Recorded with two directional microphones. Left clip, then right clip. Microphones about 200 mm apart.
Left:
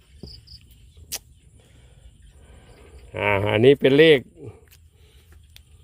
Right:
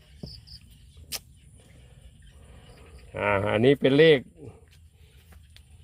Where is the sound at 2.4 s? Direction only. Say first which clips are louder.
Left 3 dB; 25° left (ahead or behind).